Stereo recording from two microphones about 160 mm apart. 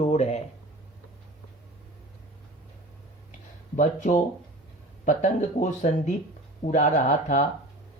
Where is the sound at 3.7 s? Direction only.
50° left (ahead or behind).